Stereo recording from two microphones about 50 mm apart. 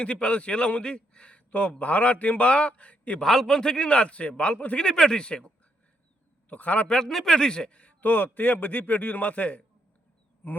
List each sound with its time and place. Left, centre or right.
0.0 s a man's voice: left
3.2 s a man's voice: centre; by 4.9 s left
4.9 s speech: centre
6.5 s a man's voice: left
6.8 s a man's voice: centre; by 9.6 s left
10.4 s a sound: left